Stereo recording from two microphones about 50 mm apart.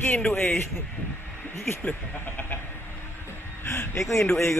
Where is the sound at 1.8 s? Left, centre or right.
Left.